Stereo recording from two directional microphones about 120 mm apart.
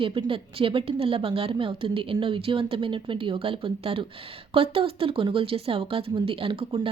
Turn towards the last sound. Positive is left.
turn(degrees=-45)  # may be behind; listen again after turning